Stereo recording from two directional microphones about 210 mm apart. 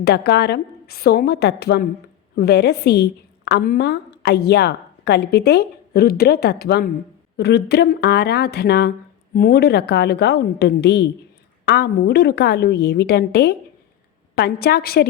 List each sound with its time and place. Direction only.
0.0 s a woman's voice: 50° left (ahead or behind)